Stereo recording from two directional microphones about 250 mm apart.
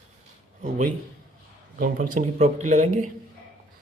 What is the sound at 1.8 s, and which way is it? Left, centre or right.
Speech, right.